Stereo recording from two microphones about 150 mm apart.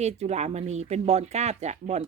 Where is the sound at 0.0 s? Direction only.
45° right (ahead or behind).